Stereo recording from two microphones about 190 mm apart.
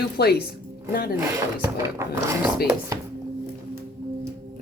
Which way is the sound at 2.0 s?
15° right (ahead or behind).